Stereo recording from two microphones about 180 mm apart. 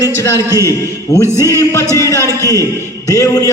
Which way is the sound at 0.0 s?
20° left (ahead or behind).